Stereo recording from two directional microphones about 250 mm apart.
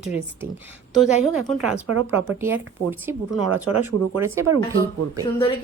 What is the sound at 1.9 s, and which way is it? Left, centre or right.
Speech, right.